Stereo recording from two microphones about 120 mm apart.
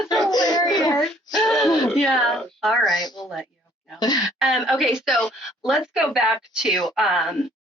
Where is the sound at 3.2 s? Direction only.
5° right (ahead or behind).